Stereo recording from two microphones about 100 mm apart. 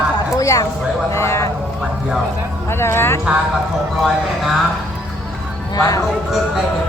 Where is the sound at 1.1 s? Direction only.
30° left (ahead or behind).